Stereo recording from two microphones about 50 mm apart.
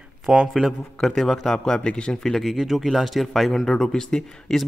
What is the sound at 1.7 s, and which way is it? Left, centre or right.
Speech, centre.